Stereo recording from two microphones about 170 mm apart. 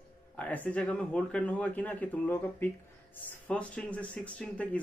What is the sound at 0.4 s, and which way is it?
Speech, 10° left (ahead or behind).